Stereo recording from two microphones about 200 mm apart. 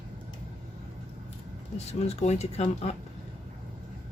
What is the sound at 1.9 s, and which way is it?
Speech, 35° left (ahead or behind).